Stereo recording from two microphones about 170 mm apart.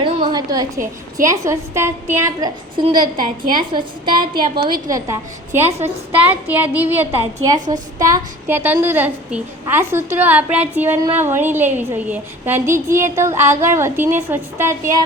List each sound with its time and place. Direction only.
0.0 s a sound: 25° right (ahead or behind)
1.1 s a woman's voice: 20° right (ahead or behind)
2.7 s a woman's voice: 30° right (ahead or behind)